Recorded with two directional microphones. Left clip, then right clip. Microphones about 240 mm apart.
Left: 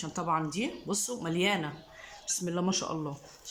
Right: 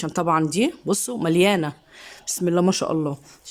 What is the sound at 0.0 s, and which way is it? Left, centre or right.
Speech, right.